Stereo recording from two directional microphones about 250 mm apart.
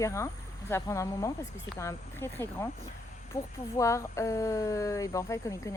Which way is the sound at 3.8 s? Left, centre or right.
Centre.